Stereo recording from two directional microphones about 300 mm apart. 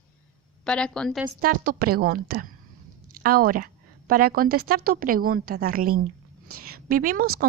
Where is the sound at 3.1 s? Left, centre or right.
Right.